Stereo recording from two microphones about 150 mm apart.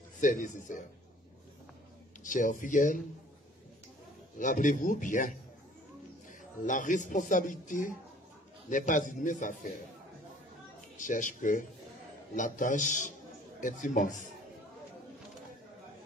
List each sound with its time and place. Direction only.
0.2 s speech: 60° left (ahead or behind)
2.2 s speech: 60° left (ahead or behind)
4.4 s speech: 60° left (ahead or behind)
6.6 s speech: 60° left (ahead or behind)
11.1 s speech: 60° left (ahead or behind)